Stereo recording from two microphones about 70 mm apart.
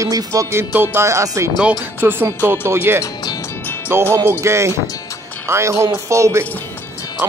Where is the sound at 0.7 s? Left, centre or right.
Right.